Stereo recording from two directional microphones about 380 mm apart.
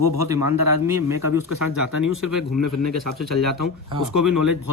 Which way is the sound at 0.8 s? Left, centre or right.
Centre.